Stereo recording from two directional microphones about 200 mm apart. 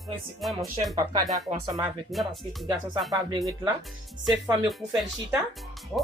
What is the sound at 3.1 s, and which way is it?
Speech, 20° right (ahead or behind).